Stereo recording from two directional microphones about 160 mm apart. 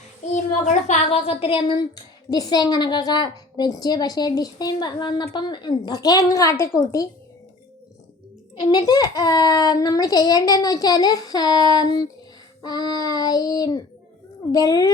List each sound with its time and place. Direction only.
0.6 s a woman's voice: 45° left (ahead or behind); by 7.1 s 20° left (ahead or behind)
8.7 s a woman's voice: 25° left (ahead or behind)